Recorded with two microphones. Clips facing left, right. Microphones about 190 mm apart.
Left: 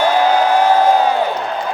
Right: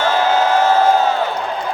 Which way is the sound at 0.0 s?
15° left (ahead or behind).